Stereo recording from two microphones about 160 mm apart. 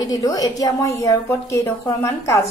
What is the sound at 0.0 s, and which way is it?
A woman's voice, 20° left (ahead or behind).